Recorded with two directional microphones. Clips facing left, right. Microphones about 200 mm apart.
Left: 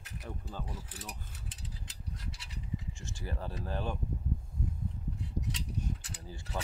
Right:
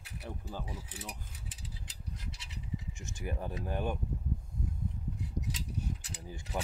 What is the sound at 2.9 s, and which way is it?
Speech, 20° right (ahead or behind).